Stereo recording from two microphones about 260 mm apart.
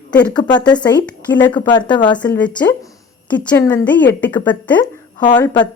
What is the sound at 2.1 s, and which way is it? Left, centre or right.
A woman's voice, centre.